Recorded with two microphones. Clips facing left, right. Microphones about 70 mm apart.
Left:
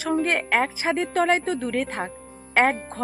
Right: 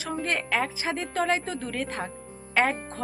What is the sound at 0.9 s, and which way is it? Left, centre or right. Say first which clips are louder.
A woman's voice: left 6 dB; left.